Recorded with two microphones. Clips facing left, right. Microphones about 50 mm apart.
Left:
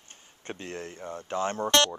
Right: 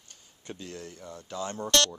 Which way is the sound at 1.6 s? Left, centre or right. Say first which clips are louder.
Left 2 dB; left.